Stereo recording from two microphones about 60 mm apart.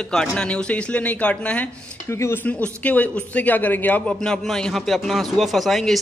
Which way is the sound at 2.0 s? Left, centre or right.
Left.